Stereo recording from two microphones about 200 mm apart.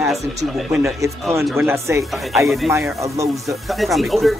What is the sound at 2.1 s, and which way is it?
Speech, centre (ahead or behind).